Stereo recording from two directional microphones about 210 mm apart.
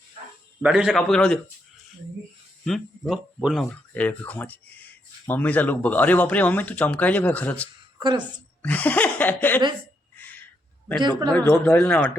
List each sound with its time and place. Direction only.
0.6 s a man's voice: 5° right (ahead or behind)
2.6 s speech: centre (ahead or behind)
7.9 s a woman's voice: 20° right (ahead or behind)
8.6 s speech: 10° left (ahead or behind)
10.2 s a sound: 10° left (ahead or behind)
11.3 s speech: 5° left (ahead or behind)